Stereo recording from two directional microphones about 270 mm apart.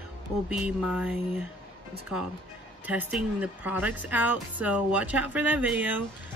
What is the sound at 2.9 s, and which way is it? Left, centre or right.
Speech, centre.